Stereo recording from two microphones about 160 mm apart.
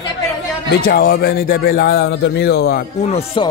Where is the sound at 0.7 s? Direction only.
75° left (ahead or behind).